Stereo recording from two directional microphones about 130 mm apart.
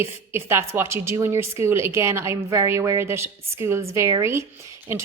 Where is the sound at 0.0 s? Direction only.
20° right (ahead or behind).